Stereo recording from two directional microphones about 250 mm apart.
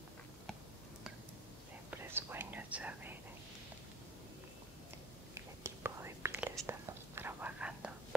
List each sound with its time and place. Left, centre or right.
1.9 s whispering: centre
5.3 s whispering: centre